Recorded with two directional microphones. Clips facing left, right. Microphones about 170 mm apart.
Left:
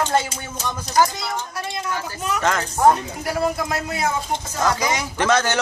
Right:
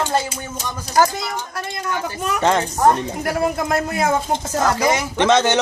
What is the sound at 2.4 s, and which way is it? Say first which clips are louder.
Speech: right 5 dB; 30° right (ahead or behind).